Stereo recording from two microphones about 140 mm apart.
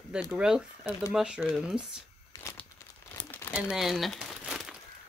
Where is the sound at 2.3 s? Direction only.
20° left (ahead or behind).